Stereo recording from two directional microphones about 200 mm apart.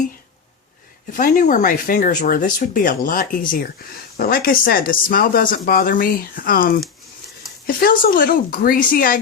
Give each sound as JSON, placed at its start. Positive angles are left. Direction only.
{"t": 1.1, "sound": "speech", "side_deg": 40}